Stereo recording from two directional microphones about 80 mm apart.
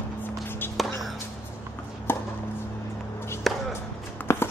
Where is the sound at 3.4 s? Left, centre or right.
Centre.